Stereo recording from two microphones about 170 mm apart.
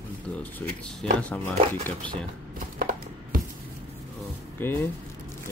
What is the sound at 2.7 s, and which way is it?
Music, 55° right (ahead or behind).